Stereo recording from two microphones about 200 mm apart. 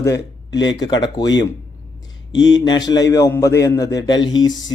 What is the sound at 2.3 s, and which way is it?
Speech, 65° left (ahead or behind).